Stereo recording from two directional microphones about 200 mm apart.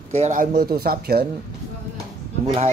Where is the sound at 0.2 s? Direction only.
35° right (ahead or behind).